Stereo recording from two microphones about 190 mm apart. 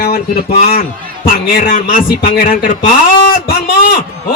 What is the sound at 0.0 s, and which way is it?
A man's voice, 55° left (ahead or behind).